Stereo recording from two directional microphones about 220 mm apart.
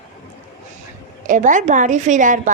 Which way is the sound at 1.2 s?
35° right (ahead or behind).